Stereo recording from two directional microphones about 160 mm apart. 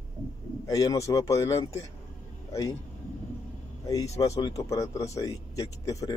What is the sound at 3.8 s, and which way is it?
A man's voice, 20° left (ahead or behind).